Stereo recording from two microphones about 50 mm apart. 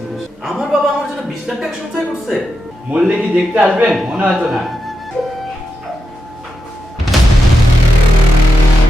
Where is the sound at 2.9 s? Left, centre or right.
Right.